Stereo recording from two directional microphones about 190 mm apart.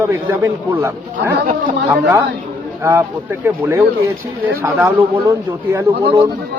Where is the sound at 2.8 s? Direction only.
15° right (ahead or behind).